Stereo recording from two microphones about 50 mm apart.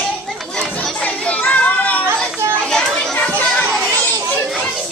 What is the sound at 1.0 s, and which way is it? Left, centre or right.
Children playing, left.